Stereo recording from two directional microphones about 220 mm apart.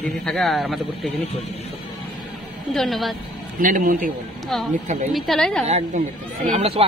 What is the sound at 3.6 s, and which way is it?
Speech, 40° right (ahead or behind).